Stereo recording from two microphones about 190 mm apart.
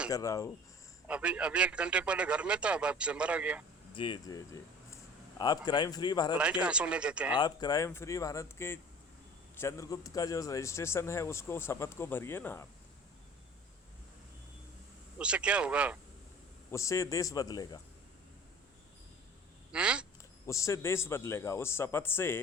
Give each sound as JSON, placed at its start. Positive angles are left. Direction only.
{"t": 0.1, "sound": "speech", "side_deg": 15}
{"t": 1.0, "sound": "a man's voice", "side_deg": -5}
{"t": 3.9, "sound": "speech", "side_deg": 25}
{"t": 6.3, "sound": "a man's voice", "side_deg": -5}
{"t": 7.3, "sound": "speech", "side_deg": 20}
{"t": 15.2, "sound": "a man's voice", "side_deg": -5}
{"t": 16.7, "sound": "speech", "side_deg": 15}
{"t": 19.7, "sound": "a man's voice", "side_deg": -5}
{"t": 20.5, "sound": "speech", "side_deg": 15}